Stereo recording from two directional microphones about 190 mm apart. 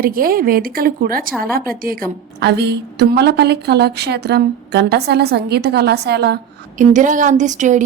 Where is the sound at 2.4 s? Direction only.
60° right (ahead or behind).